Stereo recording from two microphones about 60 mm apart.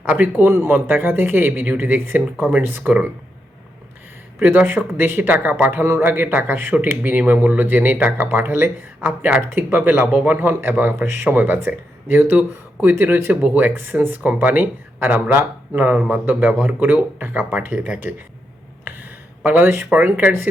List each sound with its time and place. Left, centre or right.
0.0 s speech: right
4.4 s a man's voice: right
4.6 s speech: right
5.8 s speech: right
6.1 s speech: right
10.1 s speech: centre
10.3 s speech: right
13.4 s speech: right
19.4 s speech: right